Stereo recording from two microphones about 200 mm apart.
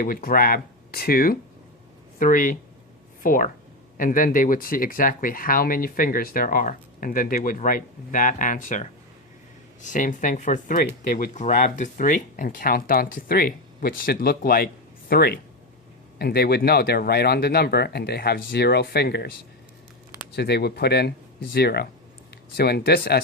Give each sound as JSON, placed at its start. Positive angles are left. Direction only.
{"t": 0.0, "sound": "speech", "side_deg": 45}
{"t": 20.3, "sound": "speech", "side_deg": 55}